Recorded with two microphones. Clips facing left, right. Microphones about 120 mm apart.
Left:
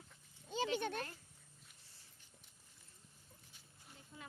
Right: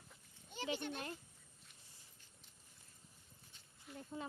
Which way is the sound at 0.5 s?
90° left.